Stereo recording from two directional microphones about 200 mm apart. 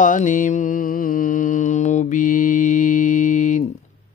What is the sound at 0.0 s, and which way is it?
Mantra, 40° left (ahead or behind).